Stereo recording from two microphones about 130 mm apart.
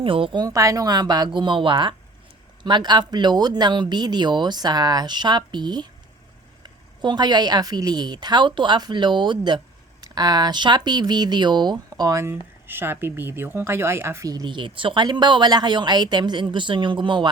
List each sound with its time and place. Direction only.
0.0 s a woman's voice: 40° right (ahead or behind)